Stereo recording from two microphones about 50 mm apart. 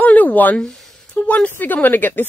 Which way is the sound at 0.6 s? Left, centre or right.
Centre.